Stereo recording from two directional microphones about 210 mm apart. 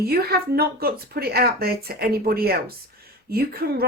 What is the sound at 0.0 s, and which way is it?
Speech, 45° right (ahead or behind).